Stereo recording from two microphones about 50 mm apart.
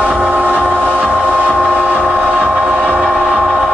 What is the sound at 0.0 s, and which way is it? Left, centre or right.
Train, right.